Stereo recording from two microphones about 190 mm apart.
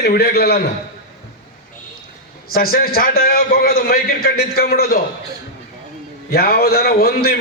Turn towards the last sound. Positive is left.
turn(degrees=55)  # may be behind; listen again after turning